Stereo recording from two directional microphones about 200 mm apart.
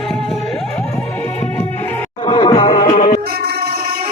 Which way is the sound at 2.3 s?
25° left (ahead or behind).